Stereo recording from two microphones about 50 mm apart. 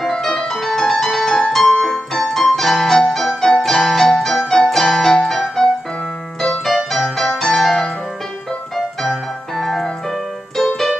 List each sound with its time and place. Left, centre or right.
0.0 s music: centre
6.6 s music: centre
10.5 s keyboard: centre